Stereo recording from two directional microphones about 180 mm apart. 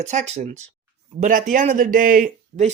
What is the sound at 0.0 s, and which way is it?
Speech, 40° right (ahead or behind).